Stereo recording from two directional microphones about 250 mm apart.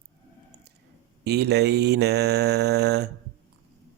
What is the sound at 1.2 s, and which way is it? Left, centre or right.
Mantra, right.